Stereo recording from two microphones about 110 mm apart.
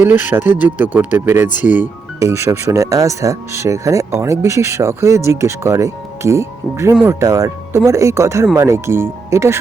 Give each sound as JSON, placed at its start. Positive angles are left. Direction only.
{"t": 0.0, "sound": "speech", "side_deg": -15}
{"t": 2.1, "sound": "speech", "side_deg": -25}